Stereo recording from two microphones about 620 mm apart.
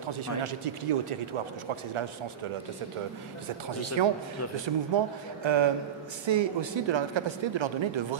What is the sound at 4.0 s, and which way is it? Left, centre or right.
A woman's voice, right.